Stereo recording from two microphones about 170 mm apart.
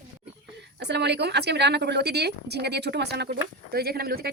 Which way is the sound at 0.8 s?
85° right.